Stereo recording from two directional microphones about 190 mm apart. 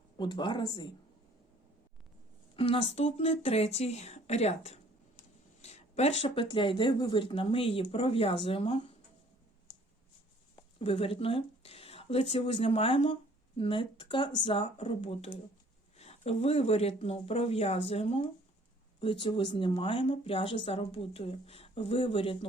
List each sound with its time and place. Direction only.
0.2 s speech: 25° left (ahead or behind)
2.6 s speech: 30° left (ahead or behind)
10.5 s speech: 30° left (ahead or behind)